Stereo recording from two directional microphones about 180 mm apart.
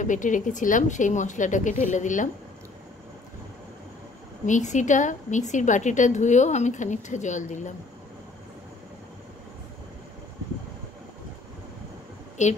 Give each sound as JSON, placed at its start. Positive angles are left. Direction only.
{"t": 0.0, "sound": "a woman's voice", "side_deg": 45}
{"t": 4.5, "sound": "a woman's voice", "side_deg": 40}
{"t": 12.4, "sound": "a woman's voice", "side_deg": 40}